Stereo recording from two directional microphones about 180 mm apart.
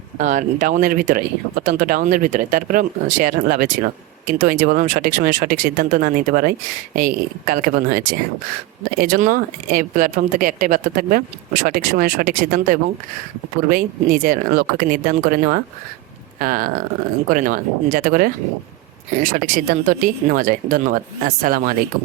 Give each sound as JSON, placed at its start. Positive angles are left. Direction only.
{"t": 0.2, "sound": "speech", "side_deg": -45}